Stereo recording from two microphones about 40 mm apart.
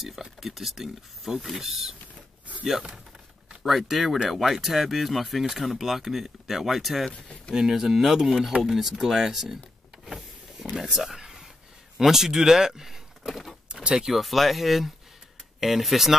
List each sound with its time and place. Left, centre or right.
0.0 s speech: centre
3.6 s speech: centre
7.1 s speech: left
7.5 s speech: centre
10.8 s a sound: centre
12.0 s speech: centre
13.3 s speech: centre